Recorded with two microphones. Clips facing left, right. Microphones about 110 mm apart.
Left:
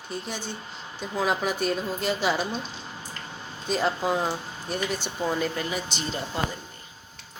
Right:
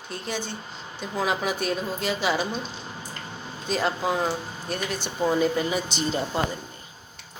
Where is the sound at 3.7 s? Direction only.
Centre (ahead or behind).